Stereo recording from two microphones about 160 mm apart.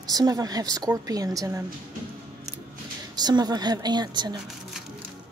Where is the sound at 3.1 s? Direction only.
25° right (ahead or behind).